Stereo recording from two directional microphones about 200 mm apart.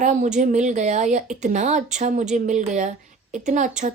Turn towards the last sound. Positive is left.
turn(degrees=-40)  # may be behind; listen again after turning